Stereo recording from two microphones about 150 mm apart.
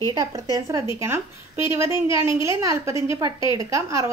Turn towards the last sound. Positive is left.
turn(degrees=-20)  # may be behind; listen again after turning